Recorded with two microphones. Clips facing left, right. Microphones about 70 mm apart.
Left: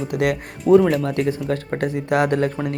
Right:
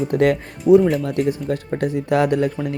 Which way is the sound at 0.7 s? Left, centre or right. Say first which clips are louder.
Right 1 dB; left.